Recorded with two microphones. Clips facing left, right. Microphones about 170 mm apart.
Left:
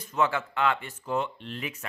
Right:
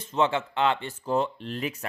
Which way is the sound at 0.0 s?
25° right (ahead or behind).